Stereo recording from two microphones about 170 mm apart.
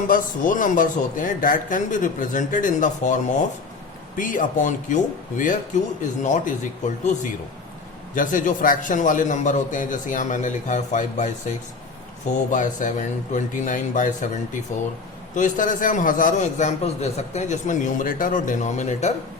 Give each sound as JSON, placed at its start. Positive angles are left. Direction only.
{"t": 0.1, "sound": "a man's voice", "side_deg": 50}
{"t": 8.1, "sound": "a man's voice", "side_deg": 50}
{"t": 12.3, "sound": "a man's voice", "side_deg": 50}